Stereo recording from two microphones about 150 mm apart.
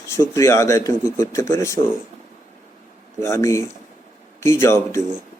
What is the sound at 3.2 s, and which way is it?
Speech, 20° left (ahead or behind).